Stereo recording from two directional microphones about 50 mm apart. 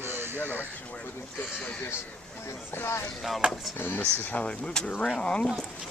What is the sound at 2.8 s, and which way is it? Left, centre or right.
Speech, left.